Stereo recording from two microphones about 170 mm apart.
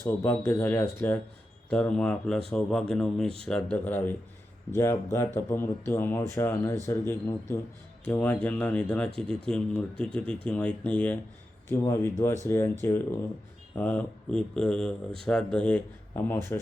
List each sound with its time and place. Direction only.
0.0 s speech: 15° left (ahead or behind)